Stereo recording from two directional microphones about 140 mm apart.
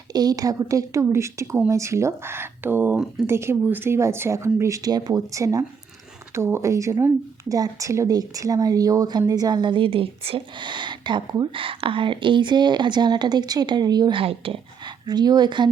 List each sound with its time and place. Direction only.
0.1 s a woman's voice: 30° right (ahead or behind)